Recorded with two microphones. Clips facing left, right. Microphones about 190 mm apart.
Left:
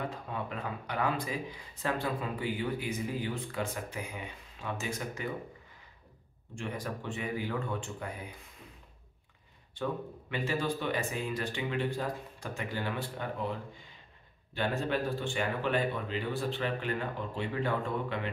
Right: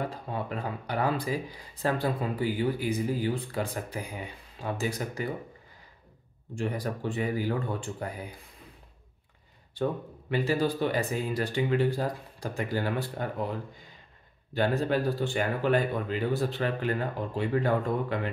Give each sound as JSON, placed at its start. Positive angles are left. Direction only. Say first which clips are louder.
{"t": 0.0, "sound": "speech", "louder": "right 4 dB", "side_deg": -35}
{"t": 6.5, "sound": "speech", "louder": "right 6 dB", "side_deg": -35}
{"t": 9.8, "sound": "speech", "louder": "right 5 dB", "side_deg": -35}